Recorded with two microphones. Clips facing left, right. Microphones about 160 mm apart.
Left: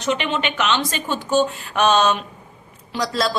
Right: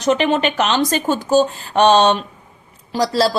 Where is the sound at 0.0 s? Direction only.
40° right (ahead or behind).